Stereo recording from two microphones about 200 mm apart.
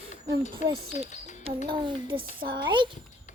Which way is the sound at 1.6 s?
25° right (ahead or behind).